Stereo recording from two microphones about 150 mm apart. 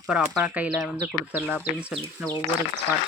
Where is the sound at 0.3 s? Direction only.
10° right (ahead or behind).